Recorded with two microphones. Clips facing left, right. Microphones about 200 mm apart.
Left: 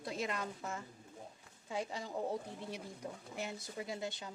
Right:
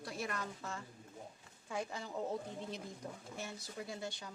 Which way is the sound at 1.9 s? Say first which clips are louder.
Left 1 dB; 15° left (ahead or behind).